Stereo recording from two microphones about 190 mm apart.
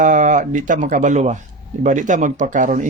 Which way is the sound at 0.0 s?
40° right (ahead or behind).